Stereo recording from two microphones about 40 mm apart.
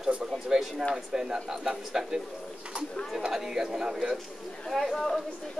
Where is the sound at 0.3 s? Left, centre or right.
Centre.